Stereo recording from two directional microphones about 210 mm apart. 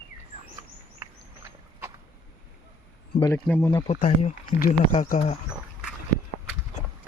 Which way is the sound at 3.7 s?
30° left (ahead or behind).